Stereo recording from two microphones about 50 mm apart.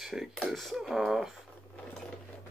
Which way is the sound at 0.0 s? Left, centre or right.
Centre.